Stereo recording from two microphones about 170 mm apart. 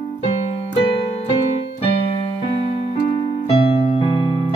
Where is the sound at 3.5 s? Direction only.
35° left (ahead or behind).